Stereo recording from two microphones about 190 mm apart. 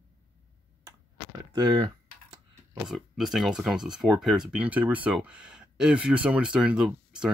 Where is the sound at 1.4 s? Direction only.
20° right (ahead or behind).